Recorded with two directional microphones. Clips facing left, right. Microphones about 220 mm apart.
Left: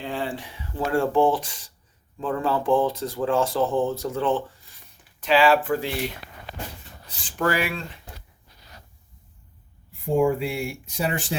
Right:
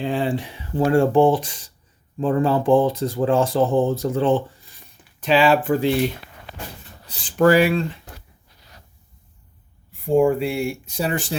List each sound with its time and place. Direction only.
0.0 s speech: 20° right (ahead or behind)
7.3 s speech: 35° right (ahead or behind)
10.2 s speech: 30° right (ahead or behind)